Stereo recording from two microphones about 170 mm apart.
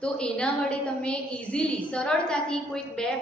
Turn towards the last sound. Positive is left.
turn(degrees=5)  # may be behind; listen again after turning